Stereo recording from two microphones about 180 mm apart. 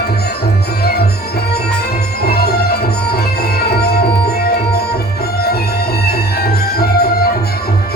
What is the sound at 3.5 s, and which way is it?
Tabla, 60° left (ahead or behind).